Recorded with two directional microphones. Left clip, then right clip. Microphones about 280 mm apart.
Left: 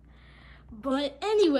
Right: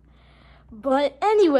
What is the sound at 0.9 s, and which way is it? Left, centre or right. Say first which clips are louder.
Speech: right 8 dB; centre.